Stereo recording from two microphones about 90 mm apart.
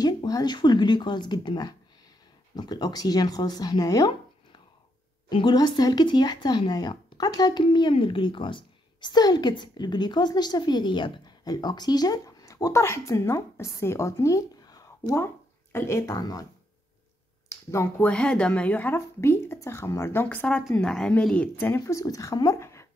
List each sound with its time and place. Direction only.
0.0 s a woman's voice: 45° left (ahead or behind)
5.3 s a woman's voice: 55° left (ahead or behind)
7.6 s a woman's voice: 70° left (ahead or behind); by 12.7 s 45° left (ahead or behind)
12.7 s a woman's voice: 30° left (ahead or behind)
15.2 s a sound: 30° left (ahead or behind)
16.0 s a woman's voice: 45° left (ahead or behind)
17.5 s speech: 30° left (ahead or behind)
18.0 s speech: 10° left (ahead or behind)
18.9 s speech: 30° left (ahead or behind); by 21.5 s 10° left (ahead or behind)
21.5 s speech: 30° left (ahead or behind)
22.6 s a sound: 30° left (ahead or behind)